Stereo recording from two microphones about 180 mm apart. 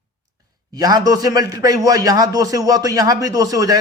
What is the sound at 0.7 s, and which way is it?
A man's voice, 20° right (ahead or behind).